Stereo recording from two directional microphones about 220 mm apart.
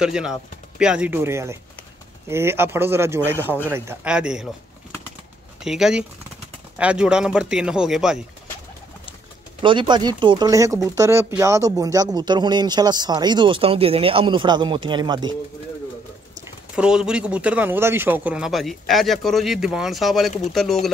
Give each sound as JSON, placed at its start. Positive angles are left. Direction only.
{"t": 0.0, "sound": "speech", "side_deg": -5}
{"t": 5.6, "sound": "speech", "side_deg": 0}
{"t": 9.6, "sound": "speech", "side_deg": -20}
{"t": 16.7, "sound": "speech", "side_deg": -5}